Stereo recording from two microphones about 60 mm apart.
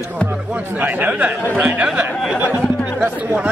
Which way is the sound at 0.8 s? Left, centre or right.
Right.